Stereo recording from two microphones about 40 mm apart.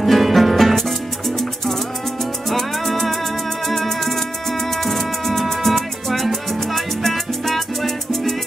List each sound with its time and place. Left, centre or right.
0.0 s music: centre